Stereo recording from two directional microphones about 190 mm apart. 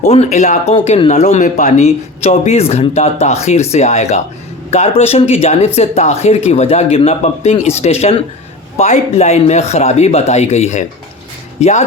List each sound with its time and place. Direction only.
0.0 s speech: 35° left (ahead or behind)